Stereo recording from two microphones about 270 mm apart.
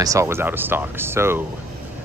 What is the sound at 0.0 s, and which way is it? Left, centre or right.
Speech, centre.